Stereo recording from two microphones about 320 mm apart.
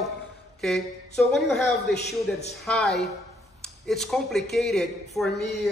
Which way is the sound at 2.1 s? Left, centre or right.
Left.